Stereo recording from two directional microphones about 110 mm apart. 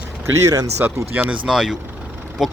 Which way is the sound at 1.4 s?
5° right (ahead or behind).